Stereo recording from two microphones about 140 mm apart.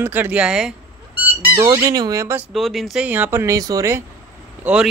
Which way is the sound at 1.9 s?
25° right (ahead or behind).